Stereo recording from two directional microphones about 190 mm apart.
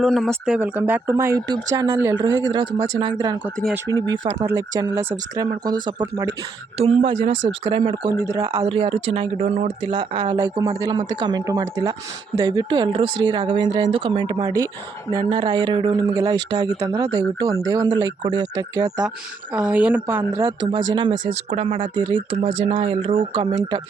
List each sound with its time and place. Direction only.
0.0 s speech: centre (ahead or behind); by 6.3 s 20° right (ahead or behind)
6.7 s speech: 30° right (ahead or behind)
8.2 s speech: 20° right (ahead or behind); by 9.7 s 35° right (ahead or behind)
9.9 s speech: 25° right (ahead or behind)
19.5 s speech: 5° right (ahead or behind)
20.9 s speech: 25° right (ahead or behind)